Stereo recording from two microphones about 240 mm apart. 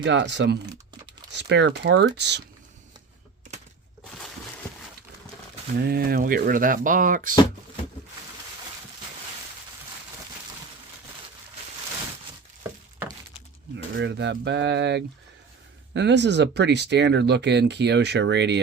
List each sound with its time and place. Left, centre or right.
0.0 s speech: right
5.7 s speech: right
13.7 s speech: right